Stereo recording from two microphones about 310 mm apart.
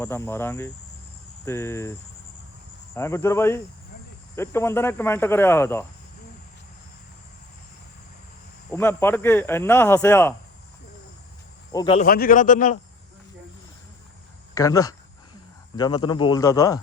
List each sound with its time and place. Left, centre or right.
0.0 s speech: centre
8.7 s speech: centre
11.7 s speech: centre
14.5 s speech: centre